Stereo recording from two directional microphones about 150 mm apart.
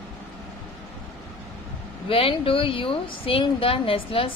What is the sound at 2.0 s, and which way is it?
A woman's voice, 35° left (ahead or behind).